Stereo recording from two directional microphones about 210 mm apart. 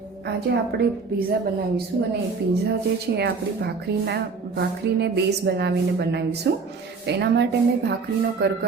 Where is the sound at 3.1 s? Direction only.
50° right (ahead or behind).